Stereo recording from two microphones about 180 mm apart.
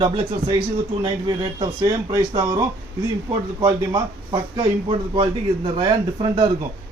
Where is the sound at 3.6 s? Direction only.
25° right (ahead or behind).